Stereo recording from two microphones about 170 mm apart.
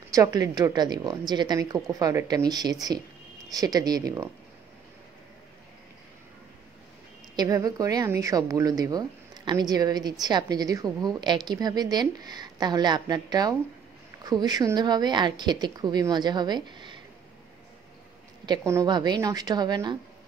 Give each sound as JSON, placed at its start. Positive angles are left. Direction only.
{"t": 0.1, "sound": "a woman's voice", "side_deg": -20}
{"t": 7.3, "sound": "a woman's voice", "side_deg": -20}
{"t": 18.4, "sound": "a woman's voice", "side_deg": -20}